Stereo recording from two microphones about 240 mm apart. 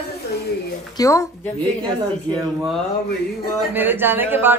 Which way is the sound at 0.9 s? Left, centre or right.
Centre.